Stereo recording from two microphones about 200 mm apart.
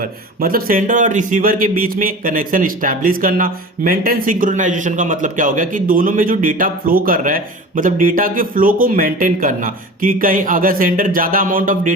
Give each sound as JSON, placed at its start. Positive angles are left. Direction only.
{"t": 0.0, "sound": "speech", "side_deg": -45}